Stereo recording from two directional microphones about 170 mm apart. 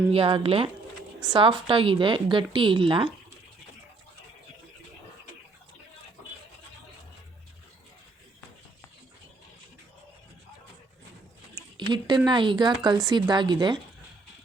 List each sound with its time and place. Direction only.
0.1 s a woman's voice: 30° right (ahead or behind)
11.8 s a woman's voice: 25° right (ahead or behind)